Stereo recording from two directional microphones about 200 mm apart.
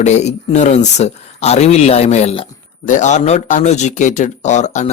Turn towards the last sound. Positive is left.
turn(degrees=35)  # may be behind; listen again after turning